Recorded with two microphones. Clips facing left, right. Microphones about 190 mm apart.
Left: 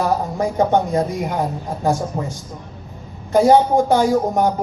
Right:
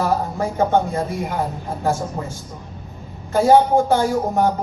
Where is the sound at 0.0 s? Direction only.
15° left (ahead or behind).